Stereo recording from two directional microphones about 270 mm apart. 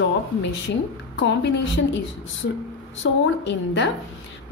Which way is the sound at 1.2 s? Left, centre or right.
Left.